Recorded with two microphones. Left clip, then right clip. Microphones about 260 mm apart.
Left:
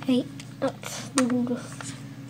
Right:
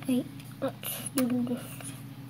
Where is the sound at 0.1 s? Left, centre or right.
Centre.